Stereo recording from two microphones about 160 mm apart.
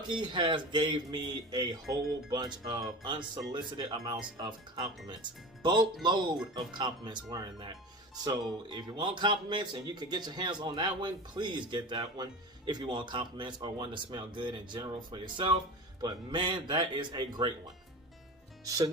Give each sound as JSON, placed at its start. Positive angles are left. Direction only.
{"t": 0.1, "sound": "speech", "side_deg": -30}
{"t": 8.7, "sound": "speech", "side_deg": -25}